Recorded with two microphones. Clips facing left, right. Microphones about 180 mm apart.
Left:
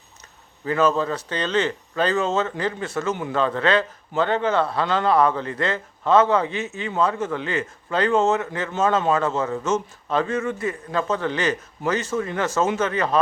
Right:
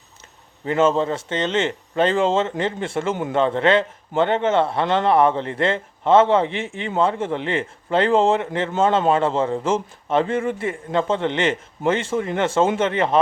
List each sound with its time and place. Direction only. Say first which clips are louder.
0.6 s speech: right 2 dB; 25° right (ahead or behind)